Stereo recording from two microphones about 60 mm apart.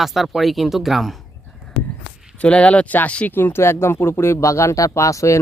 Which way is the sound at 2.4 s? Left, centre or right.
Left.